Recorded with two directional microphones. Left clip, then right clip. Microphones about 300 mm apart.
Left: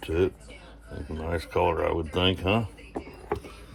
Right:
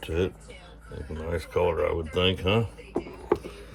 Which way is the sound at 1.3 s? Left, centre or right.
Centre.